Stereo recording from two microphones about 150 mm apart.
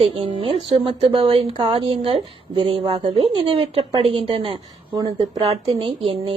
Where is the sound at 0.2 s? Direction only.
35° right (ahead or behind).